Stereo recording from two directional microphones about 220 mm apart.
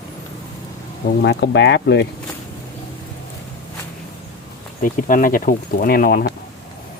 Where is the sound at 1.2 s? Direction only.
50° left (ahead or behind).